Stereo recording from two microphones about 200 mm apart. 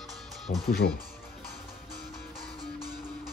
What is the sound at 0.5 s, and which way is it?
Speech, 45° left (ahead or behind).